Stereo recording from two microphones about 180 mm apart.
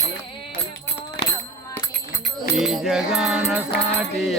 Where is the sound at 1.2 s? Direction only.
55° left (ahead or behind).